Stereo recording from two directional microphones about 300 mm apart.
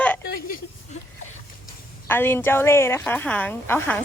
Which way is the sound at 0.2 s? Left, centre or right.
Left.